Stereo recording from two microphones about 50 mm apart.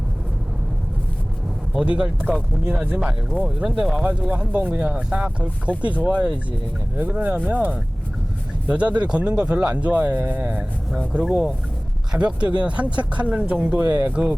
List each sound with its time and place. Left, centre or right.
1.8 s speech: centre
4.3 s speech: right
11.1 s speech: centre